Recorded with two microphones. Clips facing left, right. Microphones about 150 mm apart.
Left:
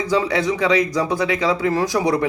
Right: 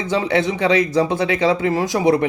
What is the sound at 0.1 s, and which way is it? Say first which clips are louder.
Speech: right 1 dB; 25° right (ahead or behind).